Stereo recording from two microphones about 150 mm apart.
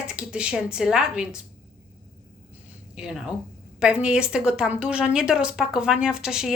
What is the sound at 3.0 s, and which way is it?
A woman's voice, 5° right (ahead or behind).